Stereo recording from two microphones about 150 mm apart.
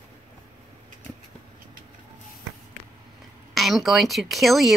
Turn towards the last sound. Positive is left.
turn(degrees=0)  # may be behind; listen again after turning